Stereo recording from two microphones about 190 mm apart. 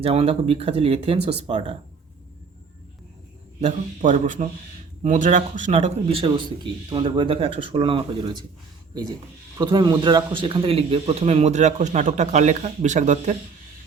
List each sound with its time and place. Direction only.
0.0 s speech: 30° right (ahead or behind)
3.6 s a man's voice: 40° right (ahead or behind); by 8.4 s 25° right (ahead or behind)
9.6 s speech: 20° right (ahead or behind); by 13.3 s 40° right (ahead or behind)